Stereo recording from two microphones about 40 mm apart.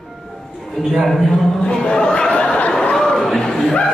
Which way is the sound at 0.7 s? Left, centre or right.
Centre.